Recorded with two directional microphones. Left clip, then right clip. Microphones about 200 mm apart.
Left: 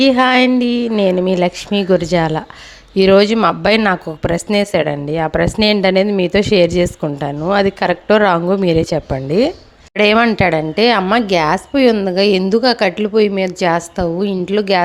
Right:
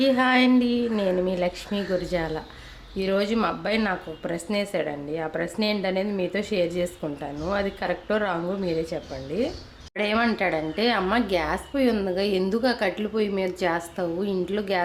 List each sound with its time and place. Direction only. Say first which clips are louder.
0.0 s a woman's voice: left 9 dB; 45° left (ahead or behind)